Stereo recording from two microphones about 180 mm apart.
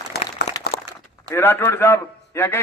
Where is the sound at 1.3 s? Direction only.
10° left (ahead or behind).